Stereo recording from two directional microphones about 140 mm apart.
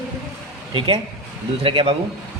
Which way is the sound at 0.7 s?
40° right (ahead or behind).